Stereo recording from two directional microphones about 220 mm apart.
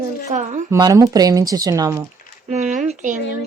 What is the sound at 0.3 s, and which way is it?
Speech, 35° right (ahead or behind).